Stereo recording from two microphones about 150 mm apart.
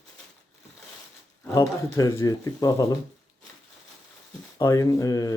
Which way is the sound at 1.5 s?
25° left (ahead or behind).